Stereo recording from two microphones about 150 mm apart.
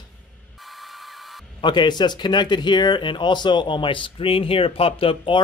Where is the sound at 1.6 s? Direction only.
30° left (ahead or behind).